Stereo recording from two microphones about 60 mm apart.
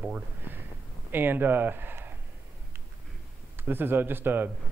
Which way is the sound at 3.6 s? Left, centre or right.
Right.